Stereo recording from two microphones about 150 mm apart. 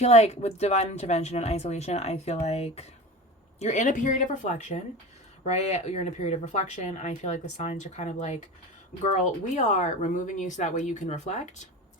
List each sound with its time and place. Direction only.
0.0 s speech: 45° left (ahead or behind)